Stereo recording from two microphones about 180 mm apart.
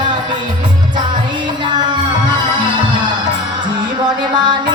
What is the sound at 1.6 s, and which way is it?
Music, 25° right (ahead or behind).